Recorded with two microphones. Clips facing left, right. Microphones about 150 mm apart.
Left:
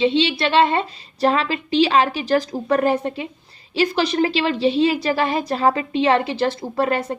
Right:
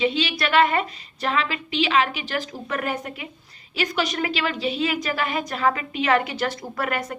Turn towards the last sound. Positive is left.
turn(degrees=30)  # may be behind; listen again after turning